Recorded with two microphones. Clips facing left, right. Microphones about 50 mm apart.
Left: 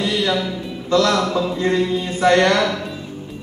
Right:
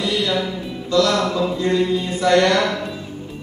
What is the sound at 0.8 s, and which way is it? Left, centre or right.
Mantra, left.